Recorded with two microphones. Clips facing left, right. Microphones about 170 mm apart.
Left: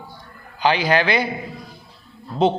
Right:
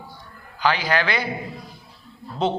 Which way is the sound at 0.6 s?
20° left (ahead or behind).